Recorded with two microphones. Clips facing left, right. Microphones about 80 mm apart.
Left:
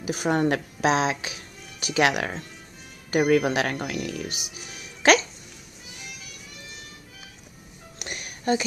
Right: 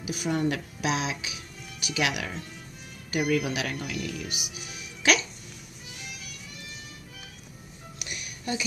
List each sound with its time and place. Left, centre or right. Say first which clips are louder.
0.0 s a woman's voice: left 4 dB; left
0.7 s speech: left 7 dB; left
4.3 s speech: even; centre
8.0 s music: left 6 dB; left